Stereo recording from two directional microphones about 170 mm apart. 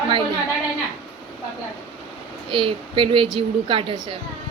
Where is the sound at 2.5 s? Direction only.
30° right (ahead or behind).